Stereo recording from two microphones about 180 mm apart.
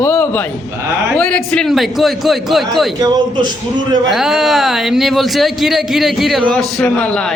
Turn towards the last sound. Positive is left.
turn(degrees=5)  # may be behind; listen again after turning